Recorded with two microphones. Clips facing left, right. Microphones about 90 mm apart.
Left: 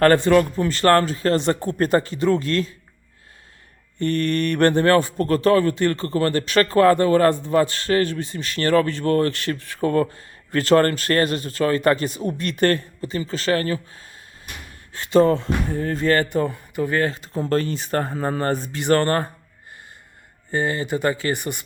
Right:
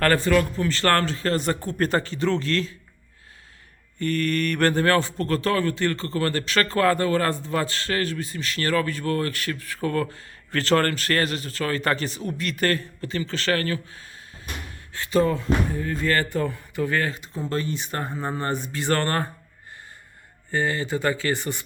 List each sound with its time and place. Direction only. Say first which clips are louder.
0.0 s speech: left 5 dB; 30° left (ahead or behind)
0.5 s speech: left 5 dB; 20° left (ahead or behind)
3.9 s speech: left 3 dB; 25° left (ahead or behind)
13.0 s speech: left 2 dB; 20° left (ahead or behind)
14.9 s speech: left 5 dB; 30° left (ahead or behind)
16.3 s speech: left 4 dB; 15° left (ahead or behind)
17.0 s speech: left 5 dB; 30° left (ahead or behind)
17.3 s speech: left 6 dB; 45° left (ahead or behind)
18.8 s speech: left 5 dB; 20° left (ahead or behind)
20.9 s speech: left 2 dB; 15° left (ahead or behind)